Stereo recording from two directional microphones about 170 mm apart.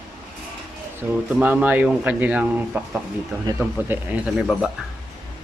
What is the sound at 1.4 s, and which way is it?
Speech, 10° right (ahead or behind).